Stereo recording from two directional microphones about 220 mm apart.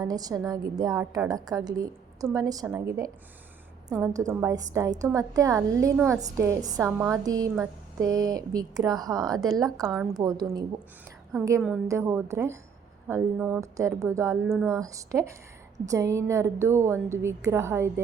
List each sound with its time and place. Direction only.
0.0 s a woman's voice: 15° right (ahead or behind)
9.8 s a woman's voice: centre (ahead or behind)
10.2 s a woman's voice: 15° right (ahead or behind)